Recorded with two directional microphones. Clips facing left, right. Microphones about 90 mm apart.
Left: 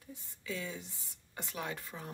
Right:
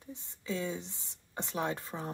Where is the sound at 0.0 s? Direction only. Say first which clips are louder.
Right 3 dB; 25° right (ahead or behind).